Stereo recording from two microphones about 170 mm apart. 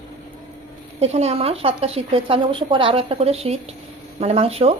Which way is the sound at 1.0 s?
40° right (ahead or behind).